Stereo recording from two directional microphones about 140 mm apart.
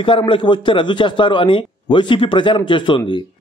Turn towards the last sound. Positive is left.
turn(degrees=35)  # may be behind; listen again after turning